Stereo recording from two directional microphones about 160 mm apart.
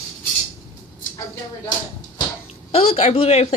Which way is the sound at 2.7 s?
40° left (ahead or behind).